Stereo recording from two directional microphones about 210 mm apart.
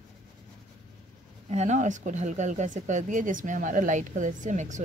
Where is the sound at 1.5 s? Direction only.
35° right (ahead or behind).